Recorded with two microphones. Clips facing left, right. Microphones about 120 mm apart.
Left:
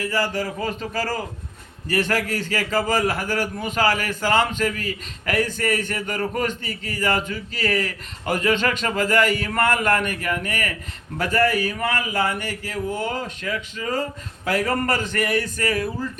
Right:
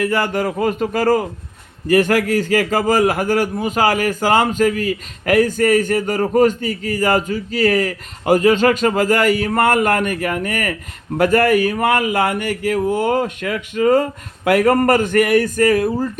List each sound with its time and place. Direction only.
0.0 s a man's voice: 60° right (ahead or behind)